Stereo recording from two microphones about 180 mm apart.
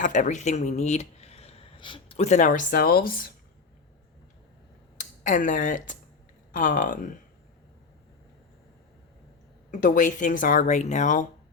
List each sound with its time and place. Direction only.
0.0 s speech: 45° left (ahead or behind)
4.9 s speech: 45° left (ahead or behind)
9.7 s speech: 45° left (ahead or behind)